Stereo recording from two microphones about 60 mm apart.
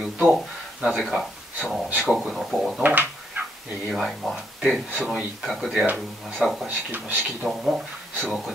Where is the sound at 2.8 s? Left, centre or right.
Right.